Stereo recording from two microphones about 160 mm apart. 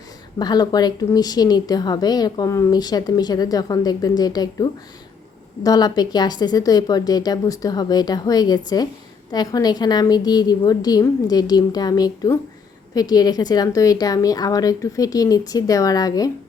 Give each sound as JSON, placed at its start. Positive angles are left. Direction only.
{"t": 0.3, "sound": "a woman's voice", "side_deg": 25}